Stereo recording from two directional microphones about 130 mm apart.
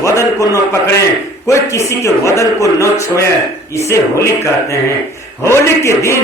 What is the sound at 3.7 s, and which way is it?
A man's voice, 20° left (ahead or behind).